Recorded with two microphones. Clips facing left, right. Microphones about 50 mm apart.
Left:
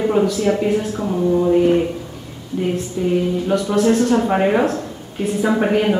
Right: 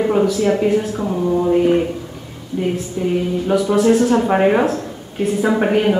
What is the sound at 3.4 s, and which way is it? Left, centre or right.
Speech, centre.